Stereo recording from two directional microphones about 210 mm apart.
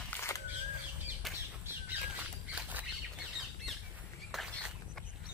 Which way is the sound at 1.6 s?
5° right (ahead or behind).